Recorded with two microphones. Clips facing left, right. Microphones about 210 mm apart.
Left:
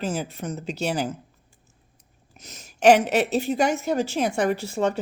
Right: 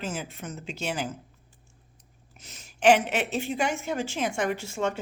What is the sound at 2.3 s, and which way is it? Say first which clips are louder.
A woman's voice: left 5 dB; 40° left (ahead or behind).